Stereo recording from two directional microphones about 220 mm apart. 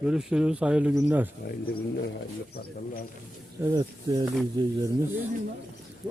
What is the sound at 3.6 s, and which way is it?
Speech, 15° right (ahead or behind).